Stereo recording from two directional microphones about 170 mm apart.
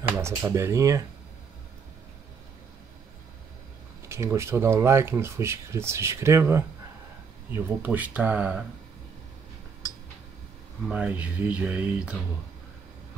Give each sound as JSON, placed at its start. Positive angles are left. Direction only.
{"t": 0.2, "sound": "speech", "side_deg": -15}
{"t": 4.1, "sound": "speech", "side_deg": -15}
{"t": 10.9, "sound": "speech", "side_deg": -5}